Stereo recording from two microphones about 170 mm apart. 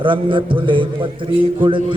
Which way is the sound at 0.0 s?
30° right (ahead or behind).